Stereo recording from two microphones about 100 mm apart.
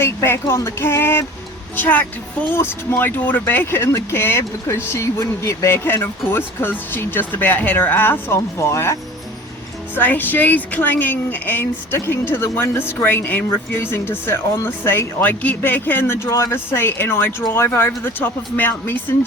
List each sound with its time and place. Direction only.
0.0 s a woman's voice: 25° left (ahead or behind)